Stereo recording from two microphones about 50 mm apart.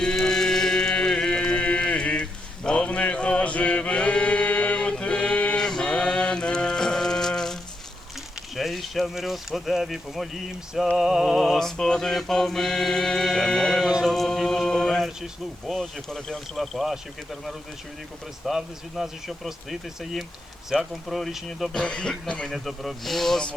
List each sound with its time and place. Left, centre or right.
0.0 s chant: centre
2.6 s mantra: left
5.6 s music: centre
8.5 s speech: centre
11.6 s mantra: centre
14.0 s music: centre
15.6 s speech: centre
18.4 s speech: centre
21.7 s speech: left
22.4 s speech: centre